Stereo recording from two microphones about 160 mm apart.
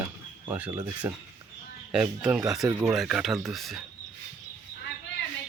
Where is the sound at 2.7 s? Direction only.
15° right (ahead or behind).